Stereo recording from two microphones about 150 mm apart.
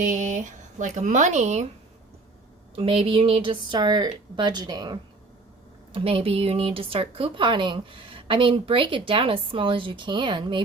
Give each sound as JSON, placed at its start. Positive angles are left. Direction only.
{"t": 0.0, "sound": "speech", "side_deg": -55}
{"t": 2.7, "sound": "speech", "side_deg": -40}
{"t": 5.9, "sound": "speech", "side_deg": -40}